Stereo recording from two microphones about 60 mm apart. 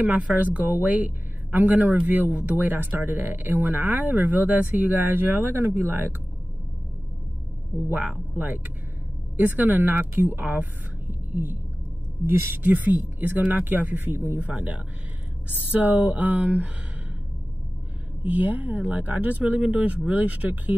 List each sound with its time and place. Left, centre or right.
0.0 s speech: right
7.9 s speech: right
12.6 s speech: right
15.4 s speech: right
18.2 s speech: right